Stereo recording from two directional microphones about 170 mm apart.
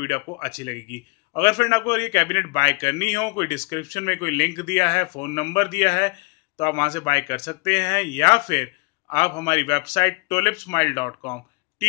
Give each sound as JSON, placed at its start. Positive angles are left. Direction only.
{"t": 0.0, "sound": "a man's voice", "side_deg": 25}